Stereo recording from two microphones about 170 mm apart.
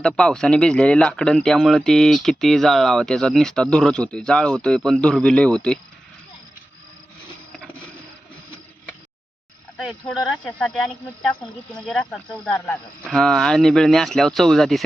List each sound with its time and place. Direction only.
0.0 s speech: 5° left (ahead or behind)
9.7 s speech: 5° left (ahead or behind)